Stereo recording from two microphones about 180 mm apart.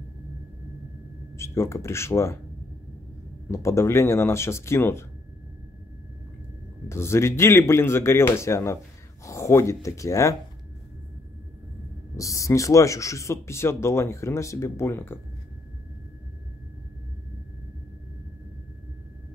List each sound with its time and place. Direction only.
1.3 s speech: 15° left (ahead or behind)
3.4 s speech: 15° left (ahead or behind)
6.9 s speech: 15° left (ahead or behind)
12.2 s speech: 15° left (ahead or behind)